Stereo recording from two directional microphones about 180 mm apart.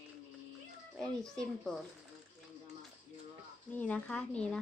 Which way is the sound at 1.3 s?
5° left (ahead or behind).